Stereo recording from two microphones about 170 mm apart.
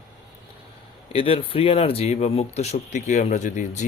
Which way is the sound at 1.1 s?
35° left (ahead or behind).